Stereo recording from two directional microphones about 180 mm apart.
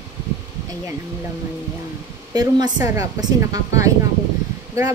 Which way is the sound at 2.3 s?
20° right (ahead or behind).